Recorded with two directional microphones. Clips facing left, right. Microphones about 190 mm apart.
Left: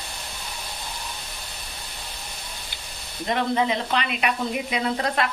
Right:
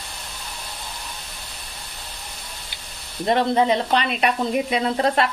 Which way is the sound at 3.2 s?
35° right (ahead or behind).